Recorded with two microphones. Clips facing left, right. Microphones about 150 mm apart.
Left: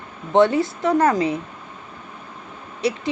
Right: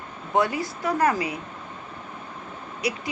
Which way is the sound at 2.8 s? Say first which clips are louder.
Left 6 dB; 25° left (ahead or behind).